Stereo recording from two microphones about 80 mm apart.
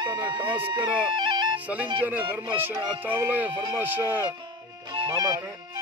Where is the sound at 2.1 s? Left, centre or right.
Right.